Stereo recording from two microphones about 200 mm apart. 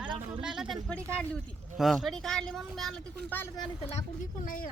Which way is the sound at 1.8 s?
Centre (ahead or behind).